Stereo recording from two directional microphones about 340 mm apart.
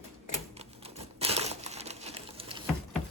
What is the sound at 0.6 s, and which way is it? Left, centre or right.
Typewriter, centre.